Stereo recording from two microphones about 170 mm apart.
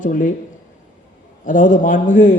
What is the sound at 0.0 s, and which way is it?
Speech, 50° left (ahead or behind).